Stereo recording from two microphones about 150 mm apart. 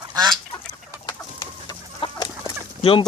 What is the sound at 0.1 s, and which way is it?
Chicken, 25° right (ahead or behind).